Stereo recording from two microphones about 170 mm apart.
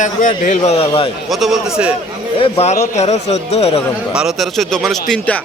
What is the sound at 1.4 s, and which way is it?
Speech, 5° right (ahead or behind).